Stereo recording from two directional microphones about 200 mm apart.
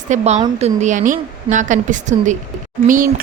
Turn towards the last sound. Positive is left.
turn(degrees=-40)  # may be behind; listen again after turning